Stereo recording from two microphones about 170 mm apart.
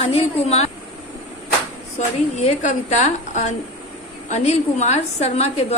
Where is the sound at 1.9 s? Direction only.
40° left (ahead or behind).